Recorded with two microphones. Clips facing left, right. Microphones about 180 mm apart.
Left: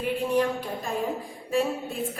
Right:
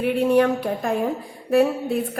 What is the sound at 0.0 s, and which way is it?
A woman's voice, 70° right (ahead or behind).